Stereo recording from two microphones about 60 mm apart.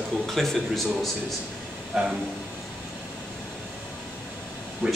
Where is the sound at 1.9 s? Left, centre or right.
Centre.